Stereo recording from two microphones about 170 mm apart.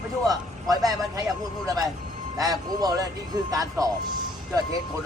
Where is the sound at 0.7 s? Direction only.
20° right (ahead or behind).